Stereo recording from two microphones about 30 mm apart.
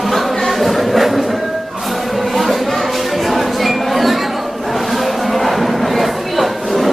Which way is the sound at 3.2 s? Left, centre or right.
Centre.